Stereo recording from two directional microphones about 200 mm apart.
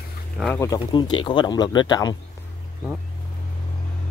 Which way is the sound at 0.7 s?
25° left (ahead or behind).